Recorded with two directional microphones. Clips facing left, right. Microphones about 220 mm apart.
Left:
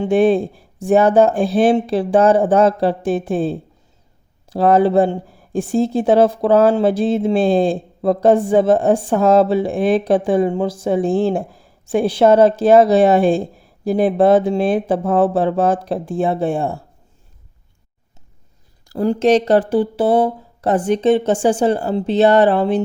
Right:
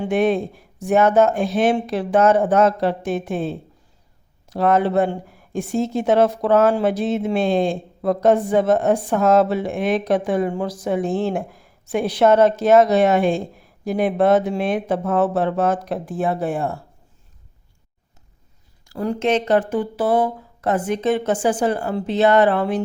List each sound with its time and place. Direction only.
0.0 s speech: 30° left (ahead or behind)
18.9 s speech: 35° left (ahead or behind)